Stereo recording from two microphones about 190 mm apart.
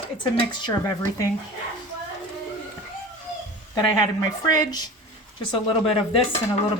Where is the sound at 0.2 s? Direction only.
25° left (ahead or behind).